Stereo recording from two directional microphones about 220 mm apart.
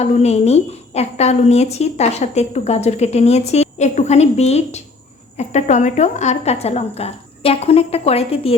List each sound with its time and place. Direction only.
0.0 s a woman's voice: 30° left (ahead or behind)